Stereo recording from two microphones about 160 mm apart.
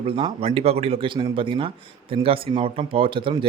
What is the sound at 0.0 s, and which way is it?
A man's voice, 35° right (ahead or behind).